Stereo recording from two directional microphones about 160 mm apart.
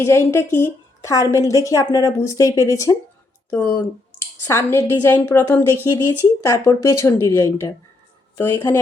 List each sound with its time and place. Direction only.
0.0 s a woman's voice: 15° left (ahead or behind)